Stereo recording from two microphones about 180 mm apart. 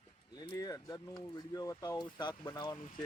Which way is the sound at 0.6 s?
20° left (ahead or behind).